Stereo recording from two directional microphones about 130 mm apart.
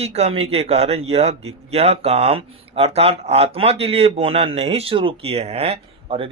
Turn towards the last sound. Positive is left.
turn(degrees=-45)  # may be behind; listen again after turning